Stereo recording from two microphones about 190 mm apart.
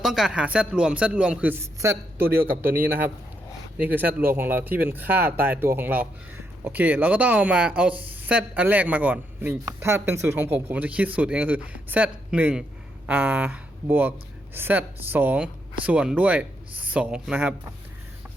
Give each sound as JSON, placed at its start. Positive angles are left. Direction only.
{"t": 0.0, "sound": "a man's voice", "side_deg": 0}
{"t": 2.6, "sound": "a man's voice", "side_deg": -50}
{"t": 3.8, "sound": "speech", "side_deg": -10}